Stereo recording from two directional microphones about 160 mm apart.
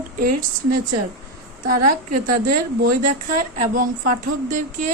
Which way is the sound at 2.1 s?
60° right (ahead or behind).